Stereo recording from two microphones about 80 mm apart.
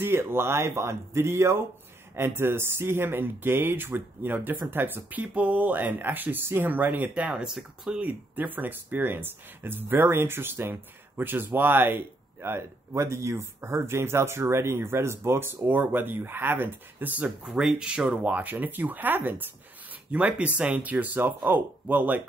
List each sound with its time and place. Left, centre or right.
0.0 s speech: right
7.2 s speech: centre
8.0 s speech: right